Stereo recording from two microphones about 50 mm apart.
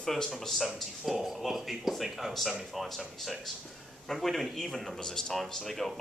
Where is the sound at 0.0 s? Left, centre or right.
Centre.